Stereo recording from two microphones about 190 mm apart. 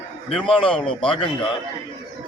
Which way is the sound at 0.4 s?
25° left (ahead or behind).